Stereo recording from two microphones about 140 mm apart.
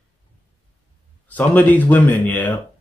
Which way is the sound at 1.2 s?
10° left (ahead or behind).